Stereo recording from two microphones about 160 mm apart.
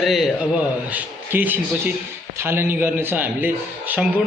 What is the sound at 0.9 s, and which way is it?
A man's voice, 10° right (ahead or behind).